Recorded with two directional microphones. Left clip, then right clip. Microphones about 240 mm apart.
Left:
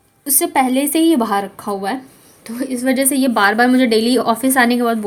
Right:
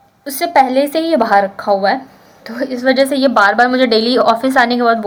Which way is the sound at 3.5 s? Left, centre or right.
Left.